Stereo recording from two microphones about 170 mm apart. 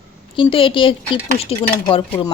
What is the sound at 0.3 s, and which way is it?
Speech, 30° left (ahead or behind).